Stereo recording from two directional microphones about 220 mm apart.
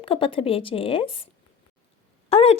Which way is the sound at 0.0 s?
25° left (ahead or behind).